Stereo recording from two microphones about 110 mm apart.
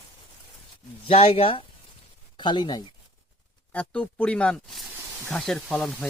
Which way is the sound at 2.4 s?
45° left (ahead or behind).